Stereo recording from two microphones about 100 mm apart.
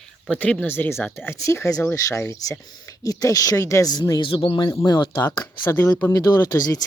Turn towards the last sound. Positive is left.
turn(degrees=35)  # may be behind; listen again after turning